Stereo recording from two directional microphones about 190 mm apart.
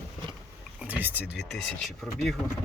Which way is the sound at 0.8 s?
10° right (ahead or behind).